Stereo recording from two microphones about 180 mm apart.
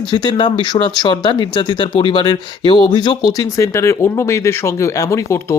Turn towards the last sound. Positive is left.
turn(degrees=15)  # may be behind; listen again after turning